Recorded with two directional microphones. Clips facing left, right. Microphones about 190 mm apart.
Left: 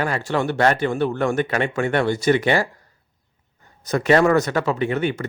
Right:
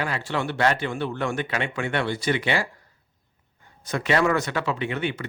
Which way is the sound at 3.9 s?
45° left (ahead or behind).